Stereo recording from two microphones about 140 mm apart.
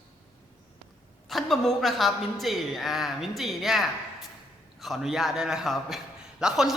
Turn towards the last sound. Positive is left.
turn(degrees=-5)  # may be behind; listen again after turning